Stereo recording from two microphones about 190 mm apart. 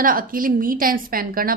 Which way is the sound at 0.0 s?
45° right (ahead or behind).